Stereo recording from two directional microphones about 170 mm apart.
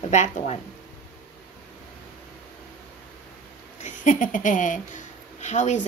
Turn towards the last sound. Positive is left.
turn(degrees=45)  # may be behind; listen again after turning